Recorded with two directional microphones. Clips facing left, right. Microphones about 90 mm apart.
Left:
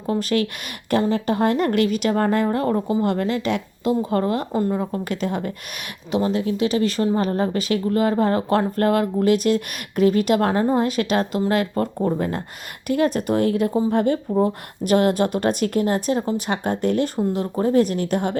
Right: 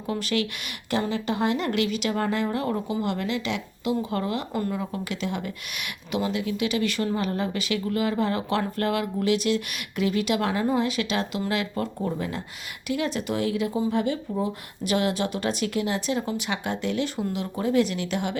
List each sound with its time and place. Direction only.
0.1 s speech: 40° left (ahead or behind)